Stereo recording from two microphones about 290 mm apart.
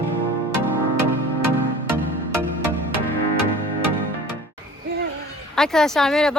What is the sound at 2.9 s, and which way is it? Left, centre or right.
Music, right.